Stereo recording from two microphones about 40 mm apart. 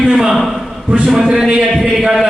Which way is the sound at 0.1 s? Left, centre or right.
Right.